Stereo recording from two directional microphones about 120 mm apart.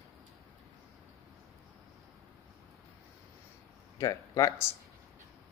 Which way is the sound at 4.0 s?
30° left (ahead or behind).